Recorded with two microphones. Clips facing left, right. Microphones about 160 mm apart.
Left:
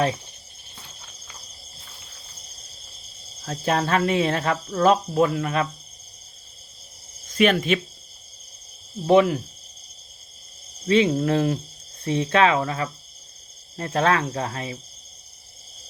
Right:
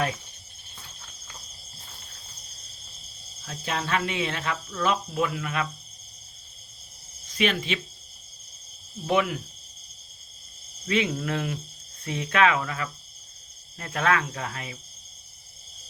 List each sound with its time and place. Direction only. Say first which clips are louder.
3.4 s speech: left 8 dB; 45° left (ahead or behind)
7.3 s speech: left 7 dB; 50° left (ahead or behind)
9.0 s speech: left 8 dB; 35° left (ahead or behind)
10.8 s speech: left 7 dB; 30° left (ahead or behind)